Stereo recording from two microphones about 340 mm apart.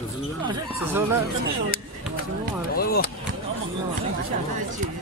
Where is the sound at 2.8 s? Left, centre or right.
Left.